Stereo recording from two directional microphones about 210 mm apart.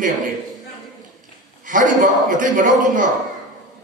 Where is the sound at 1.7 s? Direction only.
40° right (ahead or behind).